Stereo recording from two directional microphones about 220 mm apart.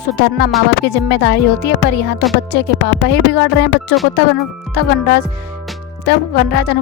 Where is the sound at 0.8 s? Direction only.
50° left (ahead or behind).